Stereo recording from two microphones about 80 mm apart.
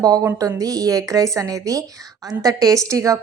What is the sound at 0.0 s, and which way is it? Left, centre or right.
A woman's voice, right.